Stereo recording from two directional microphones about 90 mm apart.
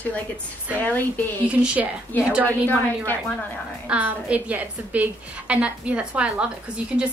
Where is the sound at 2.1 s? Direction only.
20° left (ahead or behind).